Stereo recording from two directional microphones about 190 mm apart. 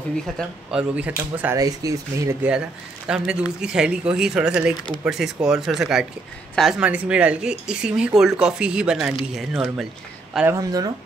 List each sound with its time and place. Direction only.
0.7 s speech: 5° right (ahead or behind)
1.6 s speech: 20° right (ahead or behind)
3.1 s speech: 5° right (ahead or behind)
10.3 s speech: 15° right (ahead or behind)